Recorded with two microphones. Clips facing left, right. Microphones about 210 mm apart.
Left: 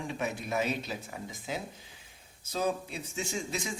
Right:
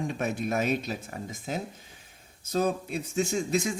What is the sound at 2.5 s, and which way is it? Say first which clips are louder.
Speech: right 5 dB; 50° right (ahead or behind).